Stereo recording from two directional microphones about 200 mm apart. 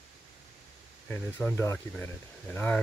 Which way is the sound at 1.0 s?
10° left (ahead or behind).